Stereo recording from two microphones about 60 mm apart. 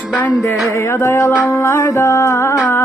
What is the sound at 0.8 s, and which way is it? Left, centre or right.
Music, left.